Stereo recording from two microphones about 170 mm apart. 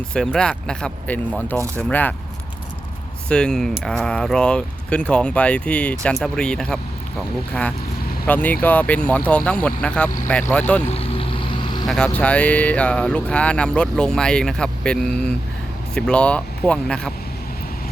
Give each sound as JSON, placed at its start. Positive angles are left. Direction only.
{"t": 0.1, "sound": "speech", "side_deg": 5}
{"t": 3.2, "sound": "speech", "side_deg": 5}
{"t": 8.3, "sound": "speech", "side_deg": 10}
{"t": 10.9, "sound": "vehicle", "side_deg": 30}
{"t": 11.9, "sound": "speech", "side_deg": 5}